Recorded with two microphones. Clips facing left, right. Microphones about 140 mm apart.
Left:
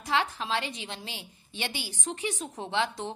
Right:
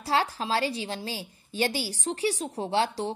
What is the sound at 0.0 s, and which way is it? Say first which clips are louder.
A woman's voice: right 2 dB; 35° right (ahead or behind).